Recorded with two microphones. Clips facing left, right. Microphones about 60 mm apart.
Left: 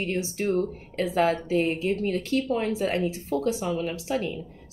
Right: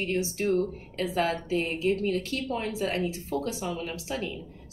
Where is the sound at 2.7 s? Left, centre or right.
Left.